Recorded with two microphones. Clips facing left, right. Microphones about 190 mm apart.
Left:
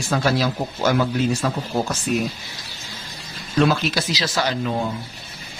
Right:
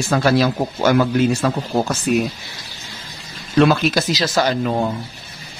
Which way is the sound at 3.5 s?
65° right (ahead or behind).